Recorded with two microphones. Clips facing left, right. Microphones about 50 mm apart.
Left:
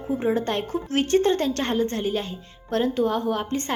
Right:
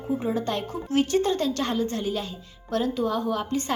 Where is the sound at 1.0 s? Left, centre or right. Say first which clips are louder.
Left 3 dB; left.